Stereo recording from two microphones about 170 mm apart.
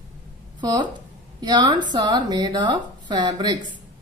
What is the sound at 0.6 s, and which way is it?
Speech, 25° right (ahead or behind).